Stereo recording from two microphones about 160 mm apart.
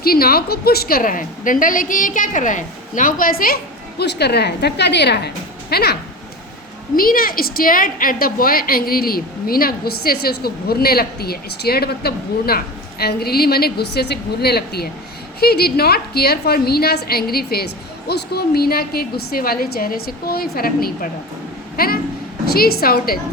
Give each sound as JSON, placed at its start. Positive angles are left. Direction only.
{"t": 0.0, "sound": "a woman's voice", "side_deg": 70}
{"t": 6.9, "sound": "a woman's voice", "side_deg": 65}
{"t": 18.1, "sound": "a woman's voice", "side_deg": 85}